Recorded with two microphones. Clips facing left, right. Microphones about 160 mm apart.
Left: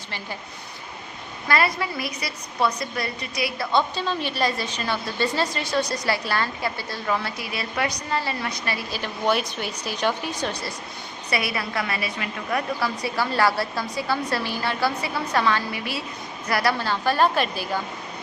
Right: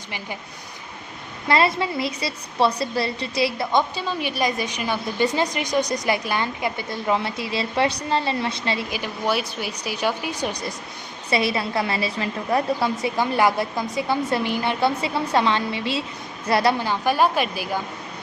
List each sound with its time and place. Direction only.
1.5 s a woman's voice: 25° right (ahead or behind)
3.7 s a woman's voice: 15° right (ahead or behind)
9.0 s a woman's voice: 5° right (ahead or behind)